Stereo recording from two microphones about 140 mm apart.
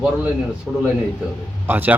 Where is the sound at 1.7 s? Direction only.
15° right (ahead or behind).